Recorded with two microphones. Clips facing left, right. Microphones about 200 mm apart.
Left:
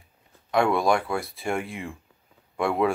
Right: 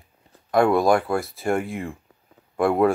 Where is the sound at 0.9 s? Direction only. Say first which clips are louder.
Right 4 dB; 50° right (ahead or behind).